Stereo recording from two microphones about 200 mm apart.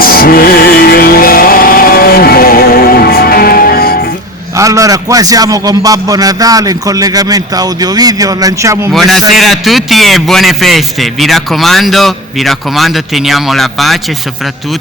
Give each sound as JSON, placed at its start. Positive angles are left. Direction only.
{"t": 0.0, "sound": "music", "side_deg": 45}
{"t": 4.5, "sound": "a man's voice", "side_deg": -15}
{"t": 8.9, "sound": "a man's voice", "side_deg": 0}